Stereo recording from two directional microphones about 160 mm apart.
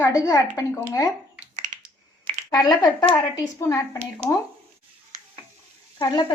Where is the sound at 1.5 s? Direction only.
45° right (ahead or behind).